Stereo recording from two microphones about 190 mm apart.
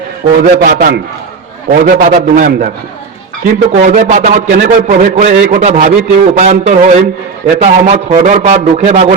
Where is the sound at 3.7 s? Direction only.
40° right (ahead or behind).